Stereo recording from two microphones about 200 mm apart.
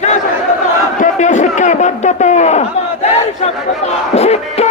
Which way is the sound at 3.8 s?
30° left (ahead or behind).